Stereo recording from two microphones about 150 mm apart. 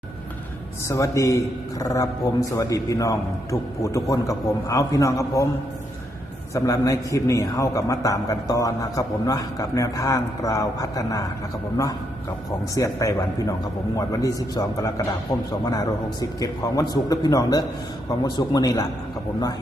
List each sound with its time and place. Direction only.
0.9 s a man's voice: 20° left (ahead or behind)
6.5 s a man's voice: 20° left (ahead or behind)
12.5 s a man's voice: 20° left (ahead or behind)